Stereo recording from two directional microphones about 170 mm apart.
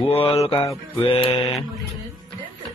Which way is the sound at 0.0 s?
35° left (ahead or behind).